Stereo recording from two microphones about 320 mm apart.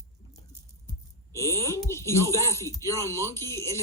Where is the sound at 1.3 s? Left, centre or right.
Centre.